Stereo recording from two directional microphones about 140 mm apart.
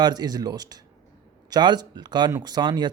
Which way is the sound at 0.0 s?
30° right (ahead or behind).